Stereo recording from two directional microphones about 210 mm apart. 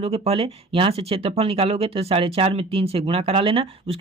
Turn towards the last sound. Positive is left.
turn(degrees=-25)  # may be behind; listen again after turning